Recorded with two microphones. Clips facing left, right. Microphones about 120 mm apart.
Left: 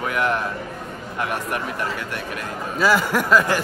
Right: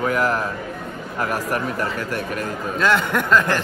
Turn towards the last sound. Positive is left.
turn(degrees=5)  # may be behind; listen again after turning